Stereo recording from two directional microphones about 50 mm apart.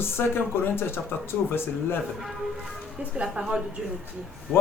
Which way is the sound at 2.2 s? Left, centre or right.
Centre.